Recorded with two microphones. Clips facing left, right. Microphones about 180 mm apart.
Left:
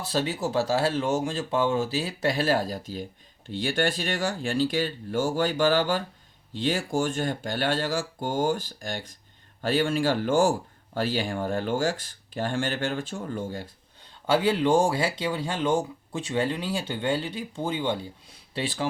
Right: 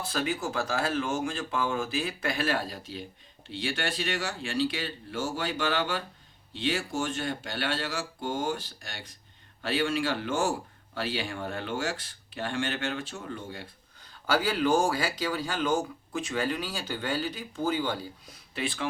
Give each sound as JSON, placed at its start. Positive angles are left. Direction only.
{"t": 0.0, "sound": "speech", "side_deg": 35}
{"t": 14.3, "sound": "speech", "side_deg": 25}
{"t": 18.5, "sound": "speech", "side_deg": 35}